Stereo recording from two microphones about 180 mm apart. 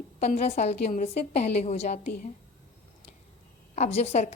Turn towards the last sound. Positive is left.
turn(degrees=35)  # may be behind; listen again after turning